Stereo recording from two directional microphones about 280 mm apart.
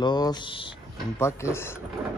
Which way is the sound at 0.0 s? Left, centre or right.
Centre.